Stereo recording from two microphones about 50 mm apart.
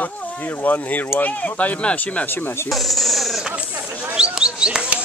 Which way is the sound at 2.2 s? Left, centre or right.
Left.